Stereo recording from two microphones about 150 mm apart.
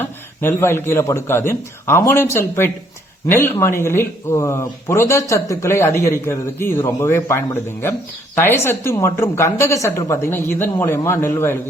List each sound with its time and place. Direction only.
0.0 s speech: 15° left (ahead or behind)